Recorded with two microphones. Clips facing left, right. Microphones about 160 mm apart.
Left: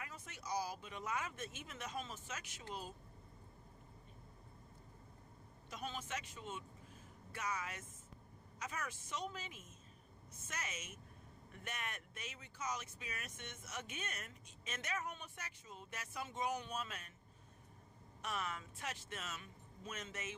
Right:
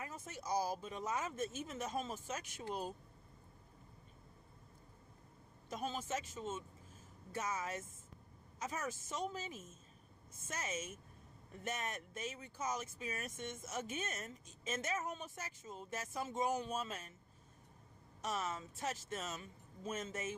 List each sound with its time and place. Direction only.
0.0 s speech: 40° right (ahead or behind)
5.6 s speech: 45° right (ahead or behind)
8.9 s speech: 45° right (ahead or behind)
10.5 s a woman's voice: 30° right (ahead or behind)
11.6 s speech: 40° right (ahead or behind)
14.1 s a woman's voice: 25° right (ahead or behind)
14.9 s speech: 45° right (ahead or behind)
18.2 s speech: 40° right (ahead or behind)